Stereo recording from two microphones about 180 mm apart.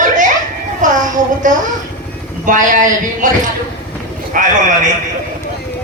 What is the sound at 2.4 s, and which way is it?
Speech, 45° right (ahead or behind).